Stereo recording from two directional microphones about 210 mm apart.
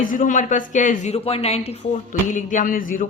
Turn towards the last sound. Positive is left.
turn(degrees=40)  # may be behind; listen again after turning